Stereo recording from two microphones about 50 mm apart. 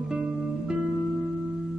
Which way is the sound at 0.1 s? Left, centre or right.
Centre.